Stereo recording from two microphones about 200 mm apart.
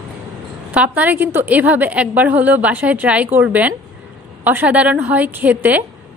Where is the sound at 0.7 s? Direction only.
10° right (ahead or behind).